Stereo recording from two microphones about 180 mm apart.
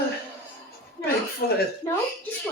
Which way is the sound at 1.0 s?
20° left (ahead or behind).